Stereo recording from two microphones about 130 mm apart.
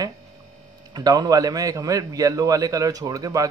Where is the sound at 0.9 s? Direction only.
30° right (ahead or behind).